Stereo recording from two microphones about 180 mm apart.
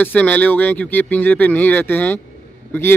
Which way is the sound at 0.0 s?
10° left (ahead or behind).